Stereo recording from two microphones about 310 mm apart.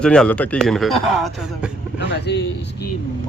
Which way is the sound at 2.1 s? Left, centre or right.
Left.